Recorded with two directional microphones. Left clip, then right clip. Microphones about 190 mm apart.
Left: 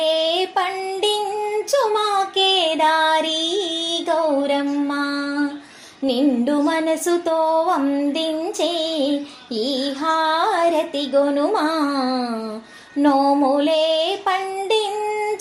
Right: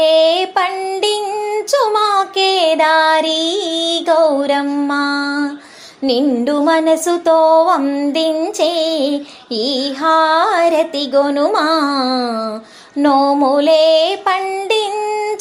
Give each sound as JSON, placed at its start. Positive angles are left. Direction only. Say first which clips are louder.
{"t": 0.0, "sound": "child singing", "louder": "right 8 dB", "side_deg": -20}
{"t": 6.1, "sound": "music", "louder": "right 4 dB", "side_deg": -25}
{"t": 13.0, "sound": "female singing", "louder": "right 4 dB", "side_deg": -20}